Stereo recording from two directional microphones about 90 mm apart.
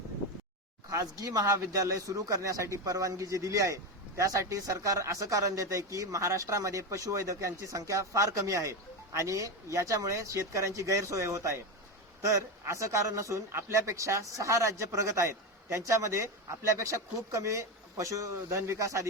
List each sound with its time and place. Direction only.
0.9 s speech: 40° right (ahead or behind)